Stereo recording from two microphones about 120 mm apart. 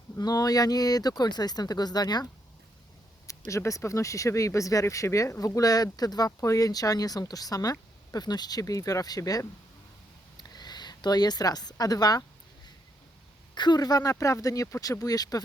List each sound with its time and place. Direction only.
0.2 s speech: 30° left (ahead or behind)
3.2 s a woman's voice: 25° left (ahead or behind)
13.5 s speech: 35° left (ahead or behind)